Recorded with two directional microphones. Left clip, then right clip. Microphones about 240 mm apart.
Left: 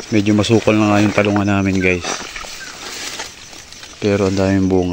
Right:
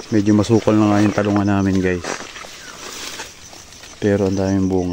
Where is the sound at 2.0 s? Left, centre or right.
Left.